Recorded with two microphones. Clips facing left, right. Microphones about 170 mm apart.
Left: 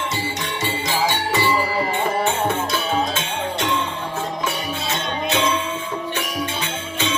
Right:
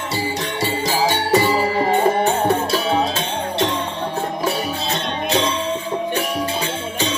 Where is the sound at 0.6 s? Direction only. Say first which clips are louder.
Right 3 dB; 40° right (ahead or behind).